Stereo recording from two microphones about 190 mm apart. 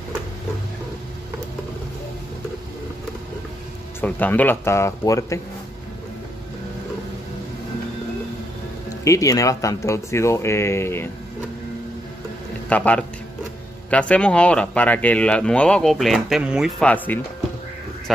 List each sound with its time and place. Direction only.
4.0 s speech: 10° left (ahead or behind)
9.0 s speech: 15° left (ahead or behind)
12.6 s a man's voice: 5° left (ahead or behind)